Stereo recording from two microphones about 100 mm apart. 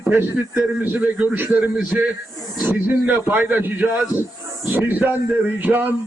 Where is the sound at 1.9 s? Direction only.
5° right (ahead or behind).